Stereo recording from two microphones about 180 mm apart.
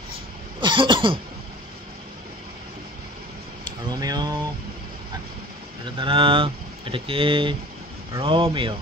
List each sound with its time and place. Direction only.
0.6 s cough: 25° right (ahead or behind)
3.6 s a sound: 25° right (ahead or behind)
5.9 s speech: 30° right (ahead or behind)
8.1 s cough: 30° right (ahead or behind)